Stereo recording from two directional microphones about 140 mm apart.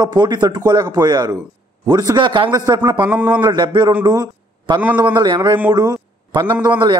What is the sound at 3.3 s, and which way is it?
A man's voice, 30° right (ahead or behind).